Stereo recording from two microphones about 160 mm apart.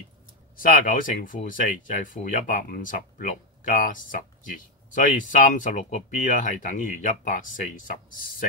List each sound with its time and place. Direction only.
0.6 s speech: 60° left (ahead or behind)